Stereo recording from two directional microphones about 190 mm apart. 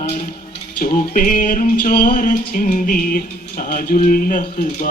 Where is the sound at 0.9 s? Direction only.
45° left (ahead or behind).